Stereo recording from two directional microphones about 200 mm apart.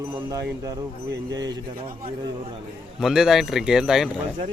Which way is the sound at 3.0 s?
Centre (ahead or behind).